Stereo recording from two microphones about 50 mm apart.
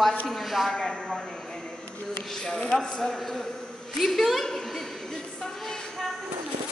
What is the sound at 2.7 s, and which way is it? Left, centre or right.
A man's voice, centre.